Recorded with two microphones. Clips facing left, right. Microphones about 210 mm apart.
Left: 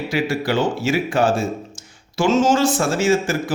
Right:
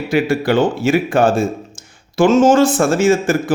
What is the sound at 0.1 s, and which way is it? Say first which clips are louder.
A man's voice: right 7 dB; 55° right (ahead or behind).